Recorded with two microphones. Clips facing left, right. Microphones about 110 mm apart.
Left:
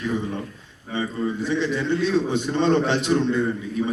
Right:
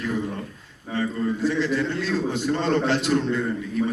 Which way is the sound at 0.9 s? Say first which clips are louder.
Even; 20° left (ahead or behind).